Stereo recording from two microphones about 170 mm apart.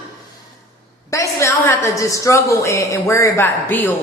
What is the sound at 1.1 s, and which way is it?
A woman's voice, 15° left (ahead or behind).